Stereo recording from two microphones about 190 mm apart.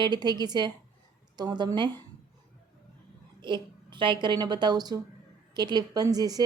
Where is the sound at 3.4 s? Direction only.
25° right (ahead or behind).